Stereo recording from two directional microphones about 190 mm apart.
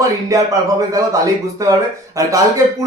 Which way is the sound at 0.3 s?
15° right (ahead or behind).